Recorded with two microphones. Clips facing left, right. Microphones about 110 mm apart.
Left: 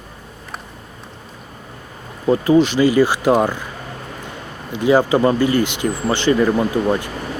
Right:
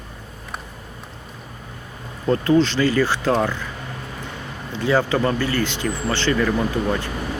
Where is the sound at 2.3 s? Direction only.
15° left (ahead or behind).